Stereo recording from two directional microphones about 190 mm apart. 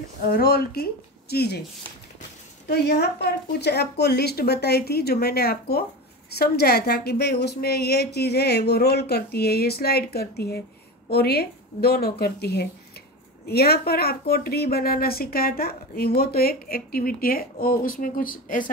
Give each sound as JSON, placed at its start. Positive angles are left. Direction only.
{"t": 0.3, "sound": "a woman's voice", "side_deg": 55}
{"t": 2.6, "sound": "a woman's voice", "side_deg": 60}